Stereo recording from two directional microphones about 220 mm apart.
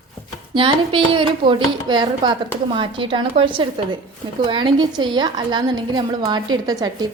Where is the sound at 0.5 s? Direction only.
20° right (ahead or behind).